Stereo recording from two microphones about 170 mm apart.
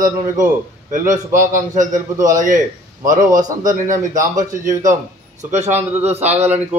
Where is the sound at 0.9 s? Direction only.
50° right (ahead or behind).